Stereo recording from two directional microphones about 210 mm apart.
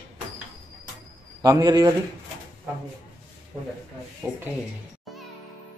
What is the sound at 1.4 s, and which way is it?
Speech, 15° right (ahead or behind).